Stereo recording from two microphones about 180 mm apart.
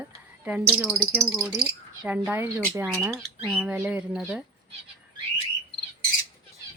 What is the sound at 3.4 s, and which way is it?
Speech, centre (ahead or behind).